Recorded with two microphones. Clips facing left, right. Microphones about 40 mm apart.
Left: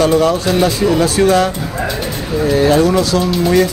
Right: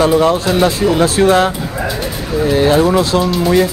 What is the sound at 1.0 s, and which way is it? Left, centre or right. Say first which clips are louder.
Speech: right 2 dB; right.